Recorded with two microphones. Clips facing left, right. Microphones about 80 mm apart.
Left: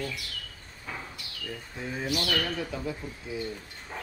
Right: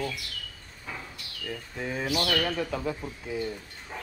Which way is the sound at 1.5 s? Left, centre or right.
Right.